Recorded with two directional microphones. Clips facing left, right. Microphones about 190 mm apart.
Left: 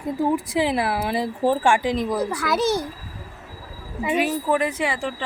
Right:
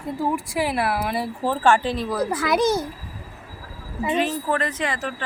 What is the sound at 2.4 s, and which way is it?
Speech, 20° right (ahead or behind).